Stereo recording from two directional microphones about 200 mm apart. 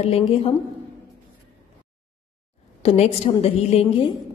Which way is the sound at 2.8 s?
30° left (ahead or behind).